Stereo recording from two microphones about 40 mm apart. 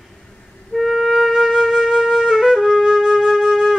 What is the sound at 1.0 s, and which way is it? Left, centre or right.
Flute, centre.